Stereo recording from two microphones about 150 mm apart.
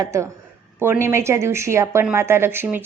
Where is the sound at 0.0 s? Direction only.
20° right (ahead or behind).